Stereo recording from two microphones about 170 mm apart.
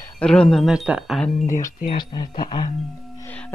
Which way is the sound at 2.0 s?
25° left (ahead or behind).